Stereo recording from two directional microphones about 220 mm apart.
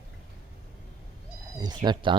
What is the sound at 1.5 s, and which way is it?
Speech, 20° right (ahead or behind).